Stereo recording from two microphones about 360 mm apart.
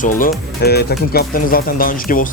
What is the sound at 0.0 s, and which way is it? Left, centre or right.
Speech, left.